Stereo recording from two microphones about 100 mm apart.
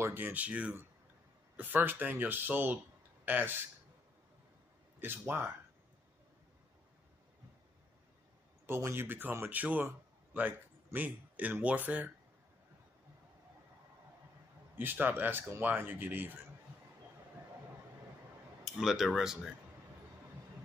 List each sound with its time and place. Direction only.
0.0 s speech: 20° right (ahead or behind)
5.0 s speech: 20° right (ahead or behind)
8.6 s speech: 25° right (ahead or behind)
14.8 s speech: 20° right (ahead or behind)
18.6 s speech: centre (ahead or behind)